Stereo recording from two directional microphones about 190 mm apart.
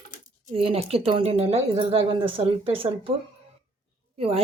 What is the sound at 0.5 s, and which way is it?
Speech, 30° right (ahead or behind).